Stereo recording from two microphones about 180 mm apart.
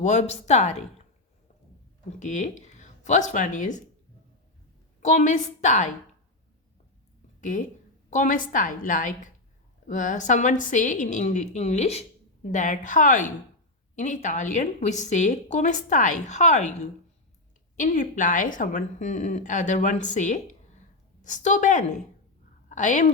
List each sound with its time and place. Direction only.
0.0 s a woman's voice: 40° left (ahead or behind)
2.1 s speech: 45° left (ahead or behind)
4.9 s a woman's voice: 45° left (ahead or behind)
7.5 s a woman's voice: 45° left (ahead or behind)